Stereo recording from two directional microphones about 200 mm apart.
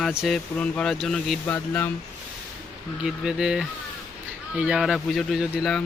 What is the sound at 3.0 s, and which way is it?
Speech, 5° right (ahead or behind).